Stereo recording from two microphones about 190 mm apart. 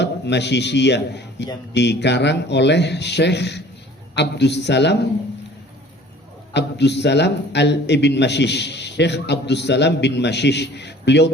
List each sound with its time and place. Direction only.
0.0 s a man's voice: 65° left (ahead or behind)
6.5 s a man's voice: 65° left (ahead or behind)